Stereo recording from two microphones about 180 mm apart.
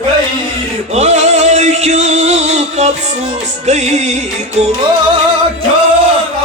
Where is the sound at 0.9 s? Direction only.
40° right (ahead or behind).